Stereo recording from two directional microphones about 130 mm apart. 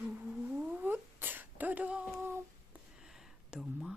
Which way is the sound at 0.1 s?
10° right (ahead or behind).